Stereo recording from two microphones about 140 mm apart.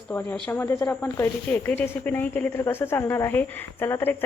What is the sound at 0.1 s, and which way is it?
Speech, 15° left (ahead or behind).